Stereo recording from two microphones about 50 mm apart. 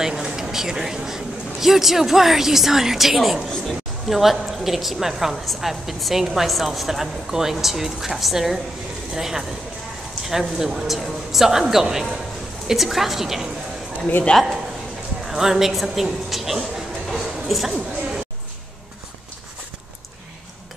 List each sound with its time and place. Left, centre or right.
0.0 s a man's voice: centre
3.4 s a man's voice: centre
4.1 s speech: centre
14.3 s speech: centre
15.2 s speech: centre
17.1 s a sound: centre